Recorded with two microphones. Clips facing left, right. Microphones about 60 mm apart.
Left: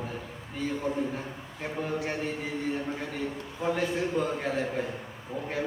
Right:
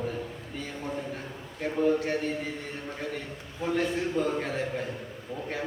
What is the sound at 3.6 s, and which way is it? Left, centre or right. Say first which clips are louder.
A man's voice: even; centre.